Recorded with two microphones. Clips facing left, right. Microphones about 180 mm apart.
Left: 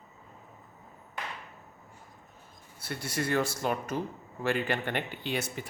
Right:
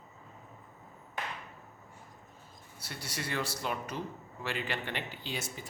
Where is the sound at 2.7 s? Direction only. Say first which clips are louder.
Left 8 dB; 55° left (ahead or behind).